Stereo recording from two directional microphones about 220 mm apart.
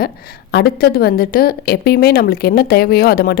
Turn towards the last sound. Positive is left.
turn(degrees=45)  # may be behind; listen again after turning